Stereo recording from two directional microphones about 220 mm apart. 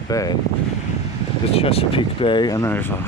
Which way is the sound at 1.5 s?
25° left (ahead or behind).